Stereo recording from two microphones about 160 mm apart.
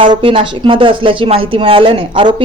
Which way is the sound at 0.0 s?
35° right (ahead or behind).